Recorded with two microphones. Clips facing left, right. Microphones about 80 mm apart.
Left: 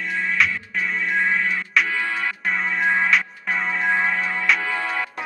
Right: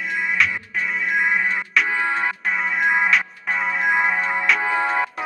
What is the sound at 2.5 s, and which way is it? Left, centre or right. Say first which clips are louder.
Music: even; centre.